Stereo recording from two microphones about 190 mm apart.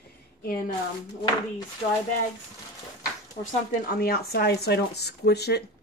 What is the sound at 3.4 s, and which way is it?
Speech, 50° left (ahead or behind).